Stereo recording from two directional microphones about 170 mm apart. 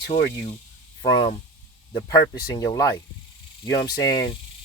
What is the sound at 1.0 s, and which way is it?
Speech, 25° left (ahead or behind).